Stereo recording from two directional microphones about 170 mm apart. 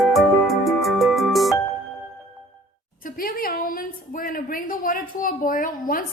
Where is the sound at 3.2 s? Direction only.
60° left (ahead or behind).